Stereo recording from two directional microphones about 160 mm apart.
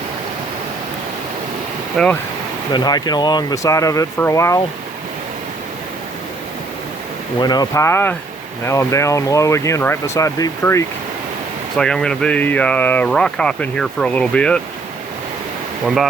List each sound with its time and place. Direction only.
2.0 s speech: 5° left (ahead or behind)
2.7 s speech: 25° left (ahead or behind)
7.3 s speech: 25° left (ahead or behind)
11.8 s speech: 5° left (ahead or behind)